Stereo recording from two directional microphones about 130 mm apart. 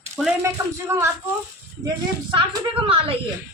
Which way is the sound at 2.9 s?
45° right (ahead or behind).